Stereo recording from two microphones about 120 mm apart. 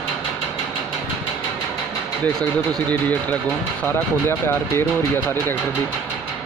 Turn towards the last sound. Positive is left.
turn(degrees=20)  # may be behind; listen again after turning